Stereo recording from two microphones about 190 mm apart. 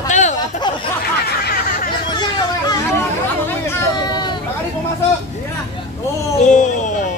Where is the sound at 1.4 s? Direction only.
50° left (ahead or behind).